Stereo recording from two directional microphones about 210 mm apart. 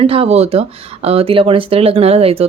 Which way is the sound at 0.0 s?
25° right (ahead or behind).